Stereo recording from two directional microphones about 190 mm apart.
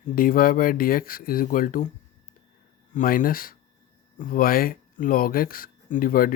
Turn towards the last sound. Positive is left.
turn(degrees=50)  # may be behind; listen again after turning